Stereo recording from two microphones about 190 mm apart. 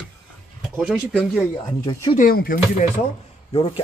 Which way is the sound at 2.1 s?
50° left (ahead or behind).